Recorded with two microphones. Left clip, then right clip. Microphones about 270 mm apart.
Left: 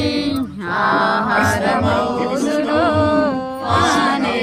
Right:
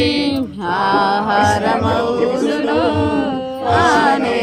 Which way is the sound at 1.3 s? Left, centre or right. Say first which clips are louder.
Right 2 dB; centre.